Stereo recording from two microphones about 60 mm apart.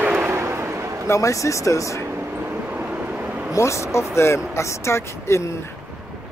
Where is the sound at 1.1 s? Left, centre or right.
Left.